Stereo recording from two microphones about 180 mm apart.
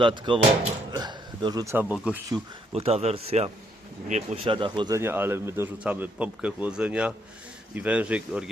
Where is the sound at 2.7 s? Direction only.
35° right (ahead or behind).